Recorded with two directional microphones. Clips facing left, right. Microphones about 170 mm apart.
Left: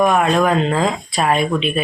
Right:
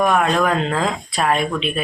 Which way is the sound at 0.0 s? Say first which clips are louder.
Left 2 dB; 10° left (ahead or behind).